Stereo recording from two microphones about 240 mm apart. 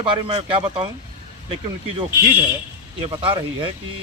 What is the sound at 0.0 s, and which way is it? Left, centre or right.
Speech, centre.